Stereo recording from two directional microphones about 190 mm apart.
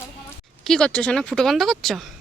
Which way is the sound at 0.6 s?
5° left (ahead or behind).